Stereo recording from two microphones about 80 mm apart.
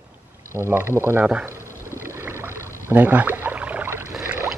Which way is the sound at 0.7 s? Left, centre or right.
Right.